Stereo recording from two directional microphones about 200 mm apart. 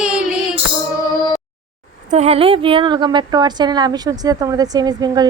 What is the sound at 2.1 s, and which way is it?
A woman's voice, 30° right (ahead or behind).